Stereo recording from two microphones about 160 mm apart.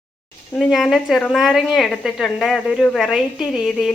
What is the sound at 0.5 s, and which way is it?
Speech, centre (ahead or behind).